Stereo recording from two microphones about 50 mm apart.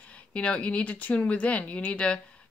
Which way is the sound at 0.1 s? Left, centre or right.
Left.